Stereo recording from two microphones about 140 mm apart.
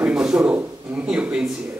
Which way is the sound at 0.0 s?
5° right (ahead or behind).